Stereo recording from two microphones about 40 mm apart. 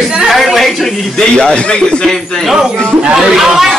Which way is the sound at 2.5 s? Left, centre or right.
Centre.